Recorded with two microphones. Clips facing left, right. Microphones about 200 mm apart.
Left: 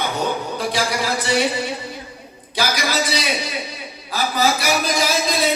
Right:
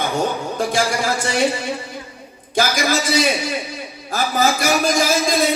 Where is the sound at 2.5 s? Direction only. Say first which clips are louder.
Right 3 dB; 50° right (ahead or behind).